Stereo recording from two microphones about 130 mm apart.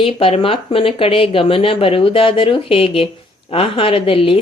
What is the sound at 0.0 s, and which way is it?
Speech, 45° left (ahead or behind).